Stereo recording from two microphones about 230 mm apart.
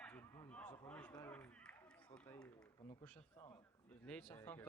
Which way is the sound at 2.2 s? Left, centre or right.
Centre.